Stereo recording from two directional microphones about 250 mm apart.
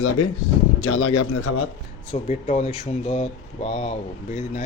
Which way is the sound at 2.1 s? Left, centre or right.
Left.